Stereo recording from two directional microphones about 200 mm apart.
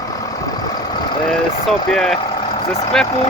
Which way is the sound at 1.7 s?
Centre (ahead or behind).